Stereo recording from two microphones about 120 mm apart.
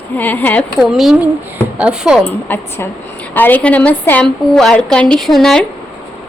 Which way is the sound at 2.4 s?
15° left (ahead or behind).